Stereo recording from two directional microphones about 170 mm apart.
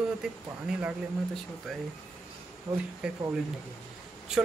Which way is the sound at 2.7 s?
20° right (ahead or behind).